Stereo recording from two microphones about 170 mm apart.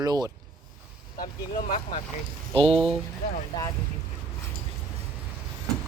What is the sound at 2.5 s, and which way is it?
Speech, 35° right (ahead or behind).